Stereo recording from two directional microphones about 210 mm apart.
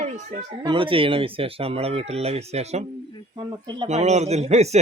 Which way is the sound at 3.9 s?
35° right (ahead or behind).